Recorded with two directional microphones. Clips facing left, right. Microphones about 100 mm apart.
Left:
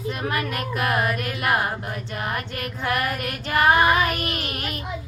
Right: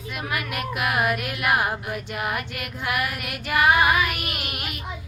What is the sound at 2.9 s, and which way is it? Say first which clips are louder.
Child singing: left 2 dB; 35° left (ahead or behind).